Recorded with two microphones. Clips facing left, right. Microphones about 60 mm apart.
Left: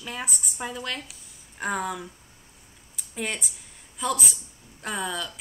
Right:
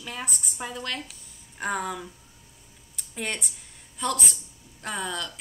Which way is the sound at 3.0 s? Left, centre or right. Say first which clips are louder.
Left 1 dB; centre.